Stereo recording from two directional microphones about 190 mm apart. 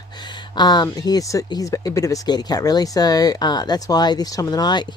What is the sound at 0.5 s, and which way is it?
Speech, 20° left (ahead or behind).